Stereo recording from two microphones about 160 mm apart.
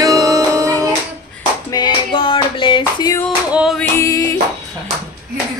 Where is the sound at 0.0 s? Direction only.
20° right (ahead or behind).